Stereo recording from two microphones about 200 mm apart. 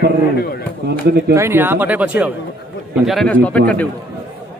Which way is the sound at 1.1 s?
55° right (ahead or behind).